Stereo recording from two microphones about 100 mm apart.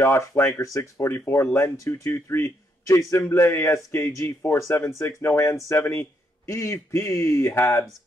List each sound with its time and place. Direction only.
0.0 s speech: 25° left (ahead or behind)